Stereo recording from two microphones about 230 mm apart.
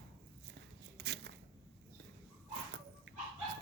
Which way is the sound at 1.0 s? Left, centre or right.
Right.